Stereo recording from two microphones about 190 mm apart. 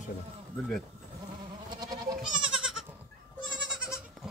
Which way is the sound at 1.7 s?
20° right (ahead or behind).